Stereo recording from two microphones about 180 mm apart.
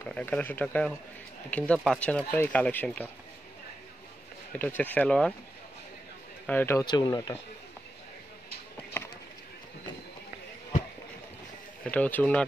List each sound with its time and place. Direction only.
0.0 s speech: 10° left (ahead or behind)
4.5 s speech: 10° left (ahead or behind)
6.4 s speech: 10° left (ahead or behind)
9.0 s bird: 10° left (ahead or behind)
11.8 s speech: 5° left (ahead or behind)